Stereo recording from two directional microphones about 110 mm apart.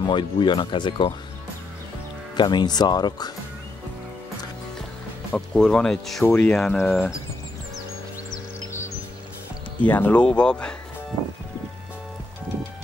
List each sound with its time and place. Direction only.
0.0 s speech: 45° left (ahead or behind)
2.3 s speech: 40° left (ahead or behind)
5.3 s speech: 10° left (ahead or behind)
9.8 s speech: 15° left (ahead or behind)